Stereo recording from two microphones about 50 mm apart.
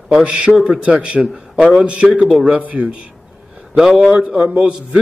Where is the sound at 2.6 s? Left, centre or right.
Right.